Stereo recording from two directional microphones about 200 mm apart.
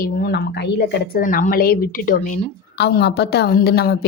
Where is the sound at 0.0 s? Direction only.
55° left (ahead or behind).